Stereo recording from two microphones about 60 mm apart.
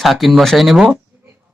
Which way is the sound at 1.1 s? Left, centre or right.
Right.